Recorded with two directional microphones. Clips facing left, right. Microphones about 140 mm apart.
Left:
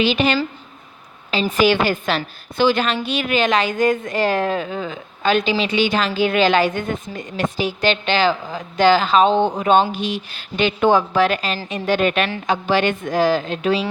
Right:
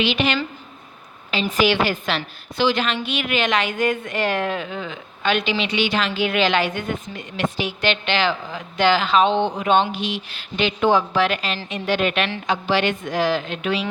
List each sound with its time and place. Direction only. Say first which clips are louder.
0.0 s a woman's voice: left 3 dB; 40° left (ahead or behind)